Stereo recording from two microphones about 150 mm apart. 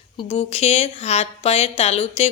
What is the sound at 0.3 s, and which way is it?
Speech, 40° left (ahead or behind).